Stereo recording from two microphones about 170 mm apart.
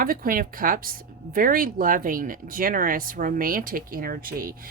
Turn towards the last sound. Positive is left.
turn(degrees=-60)  # may be behind; listen again after turning